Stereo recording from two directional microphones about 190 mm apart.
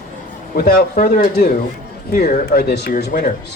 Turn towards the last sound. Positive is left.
turn(degrees=50)  # may be behind; listen again after turning